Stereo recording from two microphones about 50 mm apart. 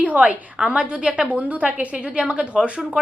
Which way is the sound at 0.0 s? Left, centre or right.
Right.